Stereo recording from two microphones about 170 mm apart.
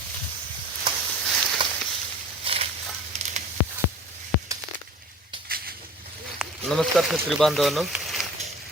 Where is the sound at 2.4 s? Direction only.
35° right (ahead or behind).